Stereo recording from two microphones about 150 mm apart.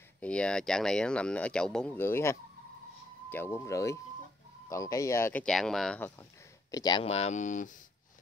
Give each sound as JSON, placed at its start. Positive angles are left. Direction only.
{"t": 0.2, "sound": "speech", "side_deg": 5}
{"t": 5.4, "sound": "speech", "side_deg": 0}
{"t": 6.7, "sound": "speech", "side_deg": 25}
{"t": 7.1, "sound": "speech", "side_deg": 45}